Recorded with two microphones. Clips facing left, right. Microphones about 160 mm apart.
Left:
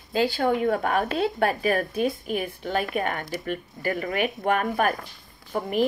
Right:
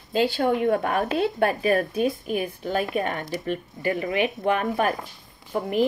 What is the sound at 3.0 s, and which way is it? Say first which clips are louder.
Speech: right 1 dB; 30° right (ahead or behind).